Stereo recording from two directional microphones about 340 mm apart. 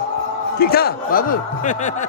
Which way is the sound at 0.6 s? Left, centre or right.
Left.